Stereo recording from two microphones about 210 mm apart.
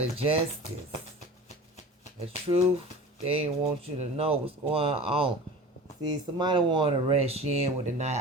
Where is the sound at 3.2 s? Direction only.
25° right (ahead or behind).